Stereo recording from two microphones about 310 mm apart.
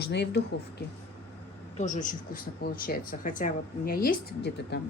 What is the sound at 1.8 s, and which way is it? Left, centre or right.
A woman's voice, left.